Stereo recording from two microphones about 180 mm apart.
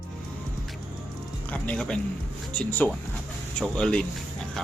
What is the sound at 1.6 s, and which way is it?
Speech, 5° left (ahead or behind).